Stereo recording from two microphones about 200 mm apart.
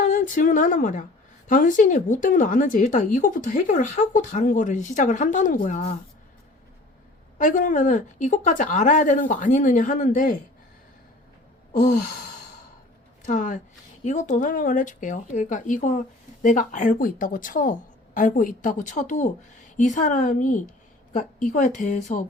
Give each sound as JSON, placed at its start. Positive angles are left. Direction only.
{"t": 0.0, "sound": "speech", "side_deg": 40}
{"t": 7.3, "sound": "speech", "side_deg": 40}
{"t": 11.8, "sound": "sigh", "side_deg": 45}
{"t": 13.2, "sound": "speech", "side_deg": 40}